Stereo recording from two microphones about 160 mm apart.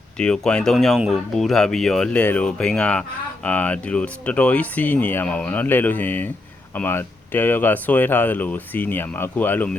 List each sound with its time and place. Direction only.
0.2 s speech: 5° left (ahead or behind)